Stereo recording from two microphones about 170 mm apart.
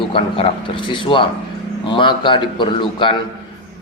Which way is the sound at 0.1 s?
30° left (ahead or behind).